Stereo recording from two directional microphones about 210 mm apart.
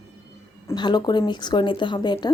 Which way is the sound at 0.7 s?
20° left (ahead or behind).